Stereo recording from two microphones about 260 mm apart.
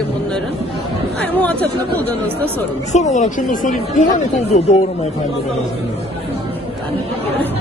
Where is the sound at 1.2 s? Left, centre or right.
Centre.